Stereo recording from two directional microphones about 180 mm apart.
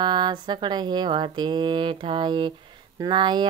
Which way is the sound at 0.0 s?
25° right (ahead or behind).